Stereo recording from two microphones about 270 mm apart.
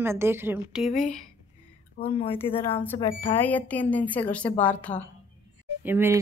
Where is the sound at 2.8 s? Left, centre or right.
Centre.